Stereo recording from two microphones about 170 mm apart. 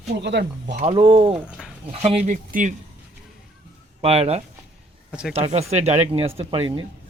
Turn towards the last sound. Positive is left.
turn(degrees=-30)  # may be behind; listen again after turning